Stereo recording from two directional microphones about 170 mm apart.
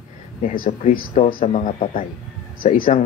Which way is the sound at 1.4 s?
40° left (ahead or behind).